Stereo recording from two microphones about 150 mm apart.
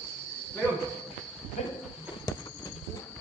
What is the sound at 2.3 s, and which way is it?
Clip-clop, 20° left (ahead or behind).